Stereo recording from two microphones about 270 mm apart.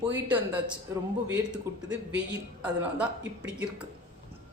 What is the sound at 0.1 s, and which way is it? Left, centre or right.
Speech, centre.